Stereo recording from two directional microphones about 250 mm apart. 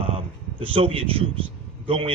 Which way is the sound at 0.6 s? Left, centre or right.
Right.